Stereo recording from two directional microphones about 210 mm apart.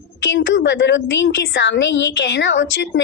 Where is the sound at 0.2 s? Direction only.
60° left (ahead or behind).